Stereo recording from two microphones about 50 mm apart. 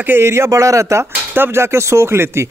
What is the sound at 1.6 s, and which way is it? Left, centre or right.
Speech, right.